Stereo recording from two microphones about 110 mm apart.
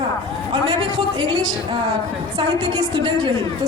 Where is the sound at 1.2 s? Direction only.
45° right (ahead or behind).